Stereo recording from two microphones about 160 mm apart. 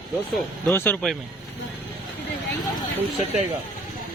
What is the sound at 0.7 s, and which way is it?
Speech, 10° left (ahead or behind).